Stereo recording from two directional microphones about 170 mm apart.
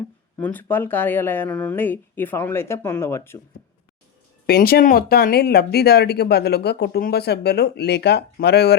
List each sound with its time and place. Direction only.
0.3 s speech: 10° left (ahead or behind)
4.4 s speech: 65° left (ahead or behind)